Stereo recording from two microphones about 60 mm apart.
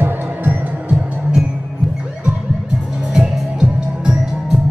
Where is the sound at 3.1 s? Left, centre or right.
Centre.